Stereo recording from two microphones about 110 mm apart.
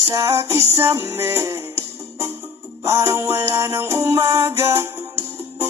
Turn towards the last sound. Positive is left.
turn(degrees=-25)  # may be behind; listen again after turning